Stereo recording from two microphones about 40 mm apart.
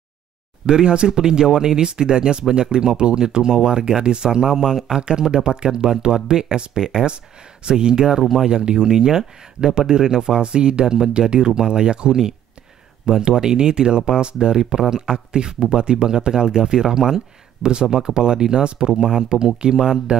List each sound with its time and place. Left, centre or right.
0.7 s speech: right
8.5 s speech: centre